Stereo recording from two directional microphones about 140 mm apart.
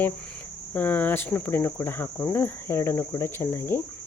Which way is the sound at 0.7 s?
10° left (ahead or behind).